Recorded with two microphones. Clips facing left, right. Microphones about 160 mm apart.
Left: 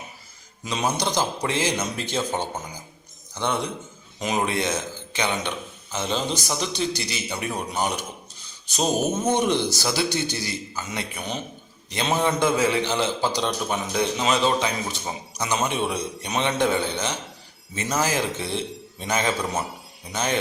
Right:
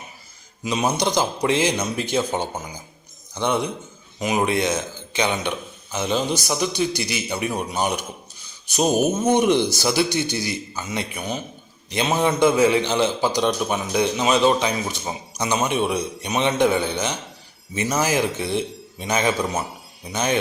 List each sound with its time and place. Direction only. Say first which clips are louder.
0.6 s a man's voice: right 4 dB; 10° right (ahead or behind)